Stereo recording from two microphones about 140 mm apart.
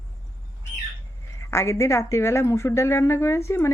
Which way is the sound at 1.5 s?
20° left (ahead or behind).